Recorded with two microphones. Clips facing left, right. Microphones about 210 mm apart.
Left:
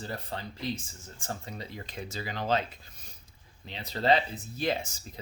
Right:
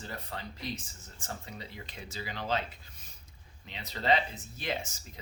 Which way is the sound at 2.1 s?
45° left (ahead or behind).